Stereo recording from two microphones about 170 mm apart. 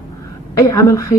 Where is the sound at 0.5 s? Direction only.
20° left (ahead or behind).